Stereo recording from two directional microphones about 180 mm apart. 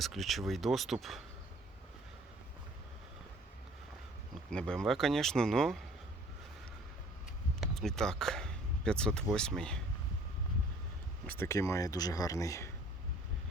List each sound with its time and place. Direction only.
0.0 s speech: centre (ahead or behind)
4.5 s speech: 5° left (ahead or behind)
7.8 s speech: 5° left (ahead or behind)
11.3 s speech: 15° left (ahead or behind)